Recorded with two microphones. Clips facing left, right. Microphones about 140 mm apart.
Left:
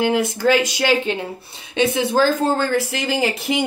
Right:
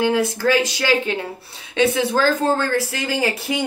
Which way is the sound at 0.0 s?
20° left (ahead or behind).